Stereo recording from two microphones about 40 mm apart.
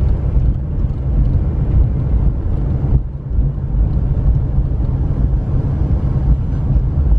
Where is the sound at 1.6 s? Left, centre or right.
Centre.